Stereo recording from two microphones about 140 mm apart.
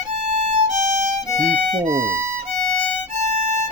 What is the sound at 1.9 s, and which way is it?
Speech, 15° right (ahead or behind).